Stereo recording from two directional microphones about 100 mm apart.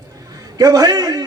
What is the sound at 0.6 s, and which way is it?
Speech, 40° right (ahead or behind).